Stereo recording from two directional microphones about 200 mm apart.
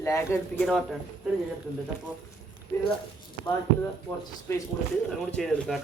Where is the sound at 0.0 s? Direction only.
15° left (ahead or behind).